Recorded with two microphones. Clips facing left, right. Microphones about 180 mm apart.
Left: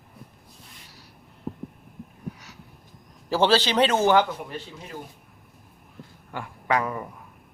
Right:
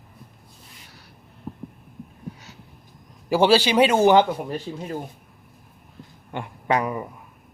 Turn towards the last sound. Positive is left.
turn(degrees=-15)  # may be behind; listen again after turning